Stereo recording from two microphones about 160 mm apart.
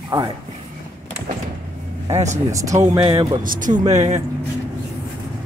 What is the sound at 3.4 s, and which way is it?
Speech, 55° right (ahead or behind).